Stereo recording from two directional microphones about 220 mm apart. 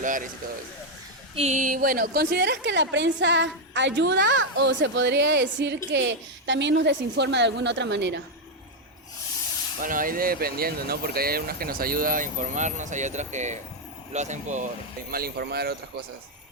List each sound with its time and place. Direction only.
0.0 s speech: 35° right (ahead or behind)
1.4 s a woman's voice: 35° right (ahead or behind); by 8.2 s 55° right (ahead or behind)
9.8 s speech: 40° right (ahead or behind)
15.1 s a woman's voice: 45° right (ahead or behind)